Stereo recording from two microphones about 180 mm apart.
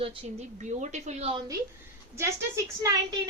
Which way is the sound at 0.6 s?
40° right (ahead or behind).